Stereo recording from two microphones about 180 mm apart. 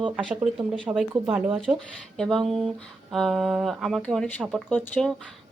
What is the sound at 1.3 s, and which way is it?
A woman's voice, 5° right (ahead or behind).